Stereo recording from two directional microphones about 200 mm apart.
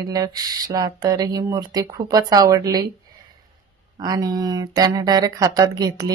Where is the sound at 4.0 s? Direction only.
20° right (ahead or behind).